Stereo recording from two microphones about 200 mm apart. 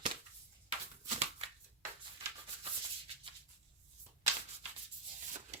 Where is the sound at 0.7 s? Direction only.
35° right (ahead or behind).